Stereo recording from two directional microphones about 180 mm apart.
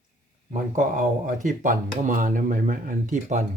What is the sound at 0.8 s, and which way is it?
Speech, 45° right (ahead or behind).